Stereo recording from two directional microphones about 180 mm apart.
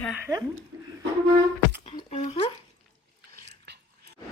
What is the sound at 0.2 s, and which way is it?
Speech, 20° right (ahead or behind).